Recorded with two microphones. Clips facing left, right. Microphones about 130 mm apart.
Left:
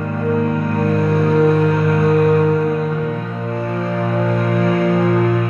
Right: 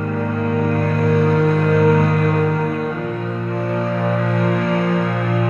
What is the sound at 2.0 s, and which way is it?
Music, 25° left (ahead or behind).